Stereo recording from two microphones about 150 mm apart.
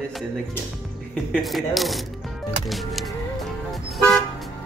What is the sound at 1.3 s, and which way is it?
Speech, centre (ahead or behind).